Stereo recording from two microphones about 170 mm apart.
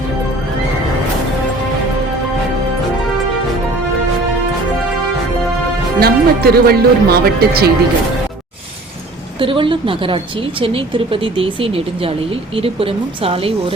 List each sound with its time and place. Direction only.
6.0 s speech: 65° right (ahead or behind)
9.4 s a woman's voice: 30° right (ahead or behind)